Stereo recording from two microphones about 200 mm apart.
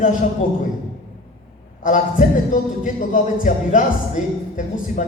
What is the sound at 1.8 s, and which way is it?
Speech, 40° left (ahead or behind).